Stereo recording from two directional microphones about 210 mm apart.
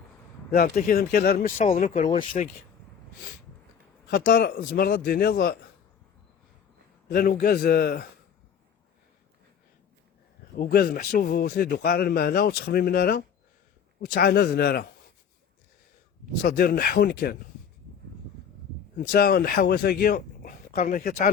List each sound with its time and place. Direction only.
0.5 s speech: 45° left (ahead or behind)
4.1 s a man's voice: 40° left (ahead or behind)
7.1 s a man's voice: 45° left (ahead or behind)
10.6 s a man's voice: 45° left (ahead or behind)
16.4 s a man's voice: 45° left (ahead or behind)
18.9 s speech: 45° left (ahead or behind)